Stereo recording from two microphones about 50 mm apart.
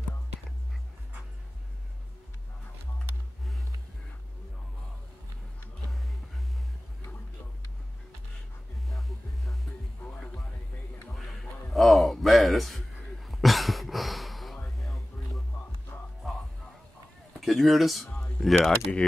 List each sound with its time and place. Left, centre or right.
8.9 s music: centre
10.0 s music: left
11.1 s a sound: centre
13.3 s throat clearing: centre
16.2 s music: centre
17.5 s speech: centre
18.7 s speech: centre